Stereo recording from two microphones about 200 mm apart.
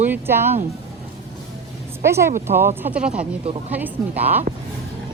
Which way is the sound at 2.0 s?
15° right (ahead or behind).